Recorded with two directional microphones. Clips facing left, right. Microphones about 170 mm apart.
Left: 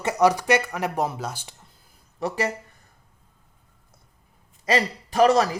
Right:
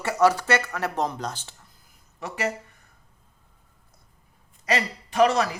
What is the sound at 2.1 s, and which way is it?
Speech, 35° left (ahead or behind).